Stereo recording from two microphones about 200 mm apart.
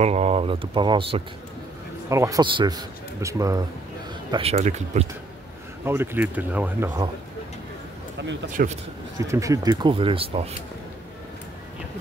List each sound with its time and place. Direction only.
0.0 s a man's voice: 35° right (ahead or behind); by 3.6 s 15° right (ahead or behind)
4.3 s speech: 30° right (ahead or behind)
5.9 s a man's voice: 10° right (ahead or behind)
8.6 s speech: 45° right (ahead or behind)
9.2 s speech: 15° right (ahead or behind)